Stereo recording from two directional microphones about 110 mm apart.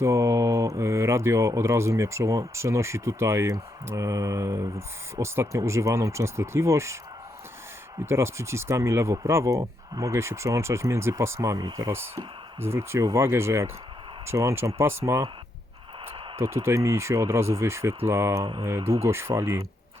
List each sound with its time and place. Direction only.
0.0 s speech: 25° right (ahead or behind)
8.0 s speech: 25° right (ahead or behind)
16.4 s speech: 25° right (ahead or behind)